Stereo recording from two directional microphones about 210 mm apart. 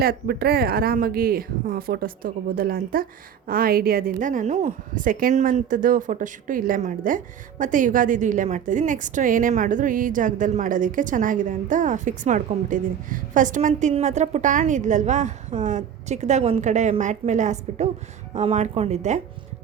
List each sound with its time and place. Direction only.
0.0 s a woman's voice: 45° right (ahead or behind)